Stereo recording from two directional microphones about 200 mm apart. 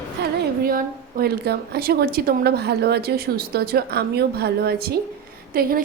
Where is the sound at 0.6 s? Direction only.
45° right (ahead or behind).